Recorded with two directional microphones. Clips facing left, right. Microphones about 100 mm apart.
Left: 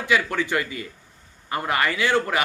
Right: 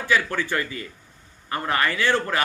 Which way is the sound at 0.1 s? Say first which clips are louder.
Left 1 dB; 20° left (ahead or behind).